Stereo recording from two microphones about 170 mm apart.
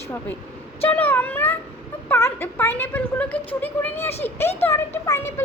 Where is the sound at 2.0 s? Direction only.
15° left (ahead or behind).